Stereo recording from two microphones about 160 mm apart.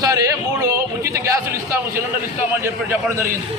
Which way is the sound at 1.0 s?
20° right (ahead or behind).